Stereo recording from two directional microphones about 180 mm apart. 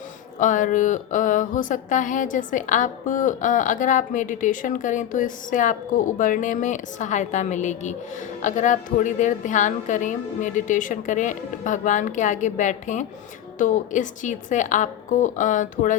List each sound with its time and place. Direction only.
0.3 s speech: 45° left (ahead or behind)